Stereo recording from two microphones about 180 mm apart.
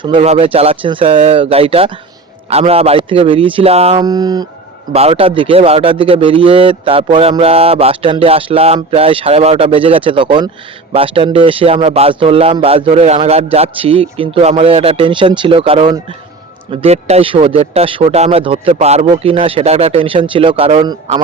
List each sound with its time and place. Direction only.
0.0 s speech: 30° right (ahead or behind)
3.9 s speech: 20° right (ahead or behind)
4.9 s speech: 35° right (ahead or behind)